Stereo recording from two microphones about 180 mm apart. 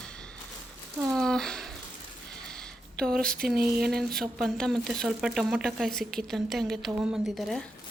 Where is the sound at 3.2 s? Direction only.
55° right (ahead or behind).